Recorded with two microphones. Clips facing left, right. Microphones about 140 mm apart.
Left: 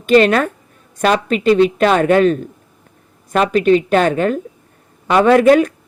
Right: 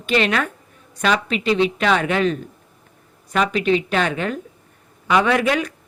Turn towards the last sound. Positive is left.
turn(degrees=45)  # may be behind; listen again after turning